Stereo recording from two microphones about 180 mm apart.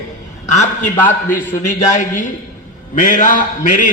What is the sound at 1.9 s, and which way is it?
A man's voice, 45° left (ahead or behind).